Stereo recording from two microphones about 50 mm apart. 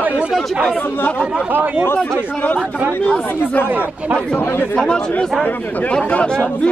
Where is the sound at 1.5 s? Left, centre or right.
Right.